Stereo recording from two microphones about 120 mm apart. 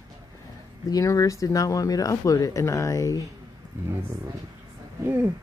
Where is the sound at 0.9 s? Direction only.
30° left (ahead or behind).